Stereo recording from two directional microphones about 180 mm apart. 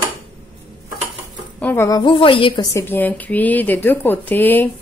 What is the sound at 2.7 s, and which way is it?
Speech, 10° left (ahead or behind).